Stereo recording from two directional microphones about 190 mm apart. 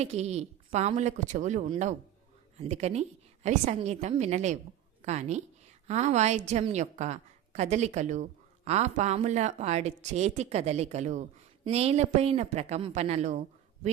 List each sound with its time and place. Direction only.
0.0 s a woman's voice: 35° right (ahead or behind)